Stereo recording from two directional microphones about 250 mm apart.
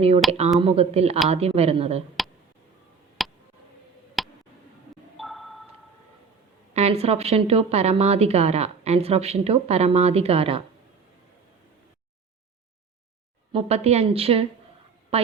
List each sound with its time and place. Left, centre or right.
0.6 s a woman's voice: right
2.2 s a sound: centre
6.7 s a woman's voice: right
13.5 s a woman's voice: right